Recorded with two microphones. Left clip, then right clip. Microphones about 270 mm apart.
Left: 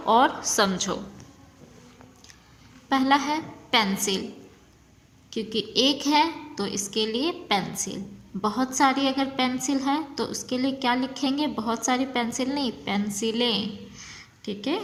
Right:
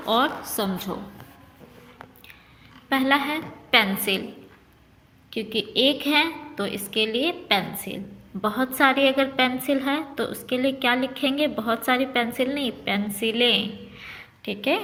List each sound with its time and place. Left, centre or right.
0.0 s a woman's voice: left
2.9 s a woman's voice: left
5.3 s a woman's voice: left